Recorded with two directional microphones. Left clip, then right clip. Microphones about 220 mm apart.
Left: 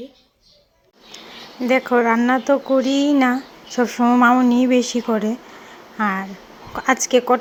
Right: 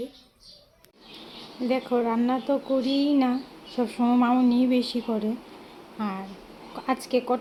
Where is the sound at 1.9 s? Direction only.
15° left (ahead or behind).